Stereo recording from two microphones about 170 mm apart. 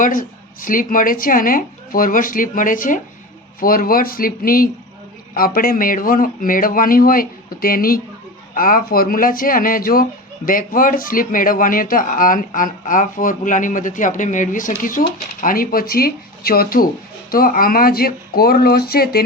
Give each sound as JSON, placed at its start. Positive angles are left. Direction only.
{"t": 0.0, "sound": "a woman's voice", "side_deg": 50}